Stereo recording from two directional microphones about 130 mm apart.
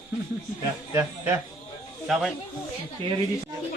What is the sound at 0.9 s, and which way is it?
Speech, 15° right (ahead or behind).